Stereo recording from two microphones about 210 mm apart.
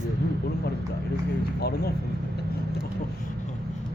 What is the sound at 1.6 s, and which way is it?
Speech, 50° left (ahead or behind).